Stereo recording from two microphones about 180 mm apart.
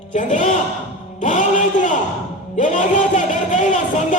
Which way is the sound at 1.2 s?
45° left (ahead or behind).